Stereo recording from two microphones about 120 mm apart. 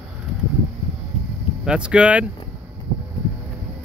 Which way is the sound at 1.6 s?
10° right (ahead or behind).